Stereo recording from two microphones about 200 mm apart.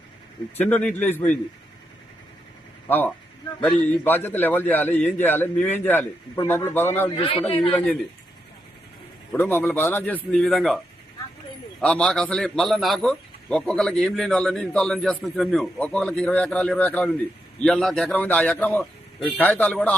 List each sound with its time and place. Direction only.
0.6 s a man's voice: 5° left (ahead or behind)
2.8 s a man's voice: 10° left (ahead or behind)
7.2 s a man's voice: 25° left (ahead or behind)
9.3 s a man's voice: 10° left (ahead or behind)
11.8 s a man's voice: 5° left (ahead or behind)